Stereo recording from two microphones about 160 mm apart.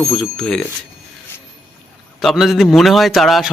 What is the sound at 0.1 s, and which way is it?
Speech, centre (ahead or behind).